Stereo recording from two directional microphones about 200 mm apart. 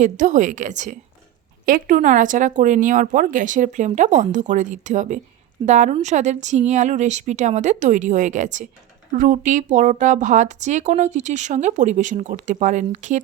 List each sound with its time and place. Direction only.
0.0 s speech: 35° right (ahead or behind)